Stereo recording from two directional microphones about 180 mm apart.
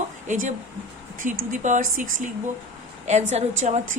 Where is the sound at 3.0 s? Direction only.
40° right (ahead or behind).